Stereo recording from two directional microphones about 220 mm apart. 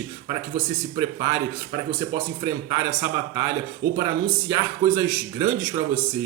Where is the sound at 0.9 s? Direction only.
15° right (ahead or behind).